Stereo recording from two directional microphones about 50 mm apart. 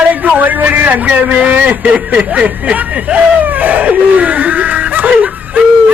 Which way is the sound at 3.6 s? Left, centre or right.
Right.